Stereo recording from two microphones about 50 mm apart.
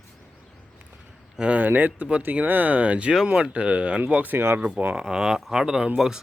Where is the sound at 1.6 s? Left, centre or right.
Right.